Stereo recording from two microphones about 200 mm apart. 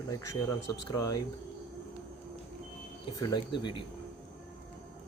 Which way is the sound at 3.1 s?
20° left (ahead or behind).